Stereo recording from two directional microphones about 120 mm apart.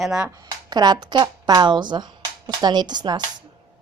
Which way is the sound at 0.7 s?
35° right (ahead or behind).